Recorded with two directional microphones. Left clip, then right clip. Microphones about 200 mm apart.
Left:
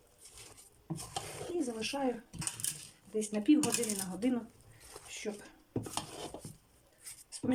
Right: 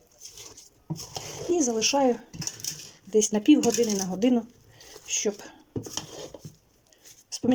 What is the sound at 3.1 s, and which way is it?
Speech, 40° right (ahead or behind).